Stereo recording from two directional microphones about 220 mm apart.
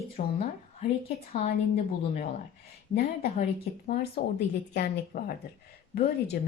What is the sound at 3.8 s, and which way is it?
A woman's voice, 40° left (ahead or behind).